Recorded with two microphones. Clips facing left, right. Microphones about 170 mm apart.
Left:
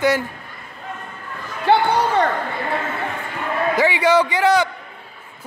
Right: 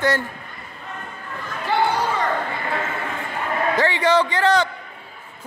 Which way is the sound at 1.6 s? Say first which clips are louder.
Left 4 dB; 65° left (ahead or behind).